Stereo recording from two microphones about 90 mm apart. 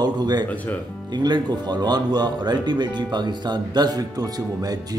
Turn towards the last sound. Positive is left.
turn(degrees=-45)  # may be behind; listen again after turning